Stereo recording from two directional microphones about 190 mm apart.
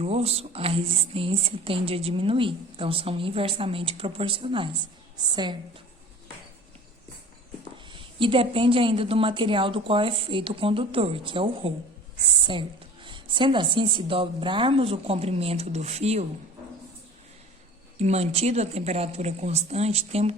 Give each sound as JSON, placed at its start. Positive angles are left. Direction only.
{"t": 0.0, "sound": "speech", "side_deg": -35}
{"t": 7.9, "sound": "speech", "side_deg": -25}
{"t": 17.9, "sound": "speech", "side_deg": -35}